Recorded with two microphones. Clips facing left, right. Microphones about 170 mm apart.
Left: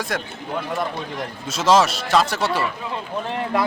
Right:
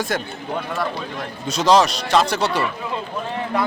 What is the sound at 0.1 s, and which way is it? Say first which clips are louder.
Speech: right 2 dB; centre (ahead or behind).